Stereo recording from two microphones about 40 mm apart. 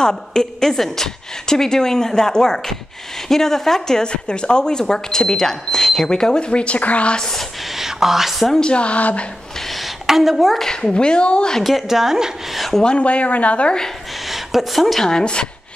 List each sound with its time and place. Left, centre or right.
0.0 s speech: centre; by 7.2 s left
7.2 s speech: centre
7.7 s speech: centre
8.5 s speech: left
10.0 s a woman's voice: centre
10.6 s speech: centre
11.6 s a woman's voice: centre
12.8 s speech: left
14.3 s speech: centre
15.0 s speech: left